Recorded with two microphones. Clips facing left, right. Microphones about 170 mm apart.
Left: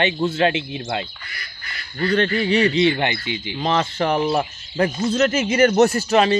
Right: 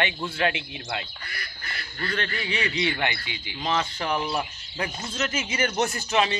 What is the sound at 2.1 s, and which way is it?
Speech, 35° left (ahead or behind).